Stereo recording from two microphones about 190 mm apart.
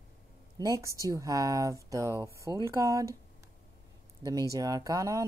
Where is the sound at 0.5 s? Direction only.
15° right (ahead or behind).